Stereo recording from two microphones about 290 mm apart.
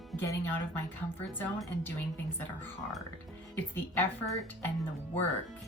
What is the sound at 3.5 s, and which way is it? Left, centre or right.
Speech, centre.